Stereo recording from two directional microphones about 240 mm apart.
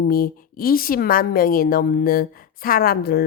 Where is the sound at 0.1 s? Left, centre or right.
Left.